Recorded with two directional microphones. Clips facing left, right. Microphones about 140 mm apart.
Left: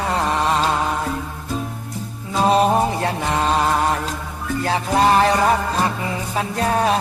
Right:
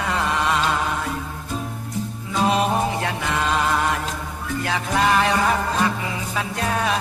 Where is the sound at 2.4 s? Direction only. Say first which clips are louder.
Left 4 dB; 35° left (ahead or behind).